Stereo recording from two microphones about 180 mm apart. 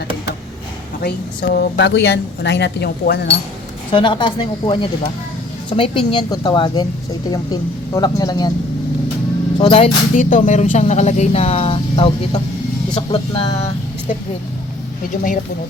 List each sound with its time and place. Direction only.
1.0 s speech: 60° left (ahead or behind)
3.9 s speech: 25° left (ahead or behind)
9.6 s speech: 30° left (ahead or behind)
10.2 s speech: 45° left (ahead or behind); by 13.7 s 30° left (ahead or behind)
15.1 s speech: 50° left (ahead or behind)